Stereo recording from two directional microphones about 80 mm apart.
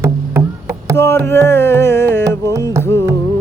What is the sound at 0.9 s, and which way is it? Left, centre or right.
Carnatic music, left.